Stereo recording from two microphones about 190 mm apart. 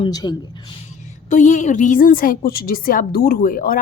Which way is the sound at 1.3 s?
40° left (ahead or behind).